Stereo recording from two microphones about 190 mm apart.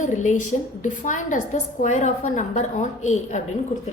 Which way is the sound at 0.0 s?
40° left (ahead or behind).